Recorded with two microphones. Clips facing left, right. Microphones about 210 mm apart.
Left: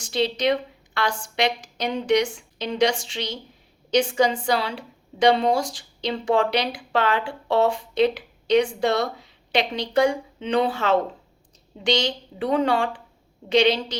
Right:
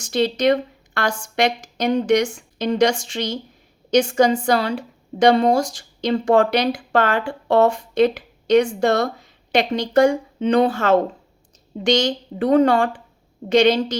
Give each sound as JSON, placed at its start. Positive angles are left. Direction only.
{"t": 0.0, "sound": "a woman's voice", "side_deg": -45}